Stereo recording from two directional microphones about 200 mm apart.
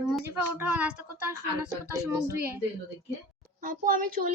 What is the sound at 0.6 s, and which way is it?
Speech, 10° right (ahead or behind).